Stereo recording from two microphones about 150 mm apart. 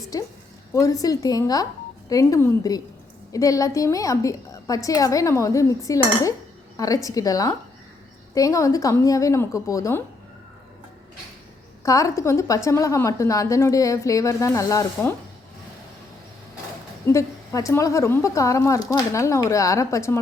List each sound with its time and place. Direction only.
0.1 s a woman's voice: 25° left (ahead or behind)
11.9 s a woman's voice: 20° left (ahead or behind)
17.1 s a woman's voice: 20° left (ahead or behind)